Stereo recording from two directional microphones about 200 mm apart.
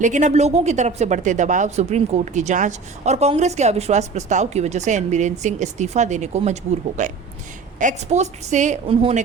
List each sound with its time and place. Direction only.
0.0 s a woman's voice: 35° right (ahead or behind)